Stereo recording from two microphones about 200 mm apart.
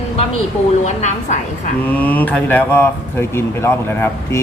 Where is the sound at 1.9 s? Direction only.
10° left (ahead or behind).